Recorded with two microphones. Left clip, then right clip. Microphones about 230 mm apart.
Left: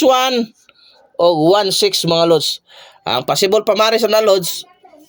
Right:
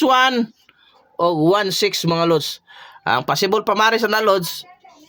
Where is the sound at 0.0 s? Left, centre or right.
Centre.